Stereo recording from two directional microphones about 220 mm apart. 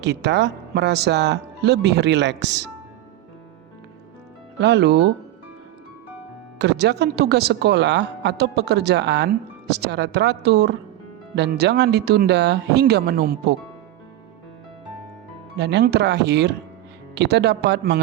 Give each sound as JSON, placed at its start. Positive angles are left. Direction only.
{"t": 0.0, "sound": "speech", "side_deg": -50}
{"t": 4.6, "sound": "speech", "side_deg": -50}
{"t": 6.6, "sound": "speech", "side_deg": -50}
{"t": 15.5, "sound": "speech", "side_deg": -50}